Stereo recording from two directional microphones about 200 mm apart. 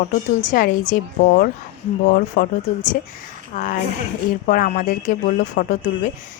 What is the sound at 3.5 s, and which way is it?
A woman's voice, 40° left (ahead or behind).